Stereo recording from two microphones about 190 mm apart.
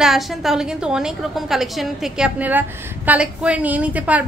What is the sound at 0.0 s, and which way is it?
A woman's voice, centre (ahead or behind).